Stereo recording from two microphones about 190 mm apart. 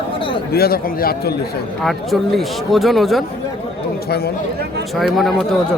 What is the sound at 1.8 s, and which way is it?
Speech, centre (ahead or behind).